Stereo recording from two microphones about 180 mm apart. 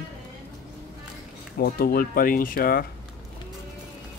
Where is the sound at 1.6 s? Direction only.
55° left (ahead or behind).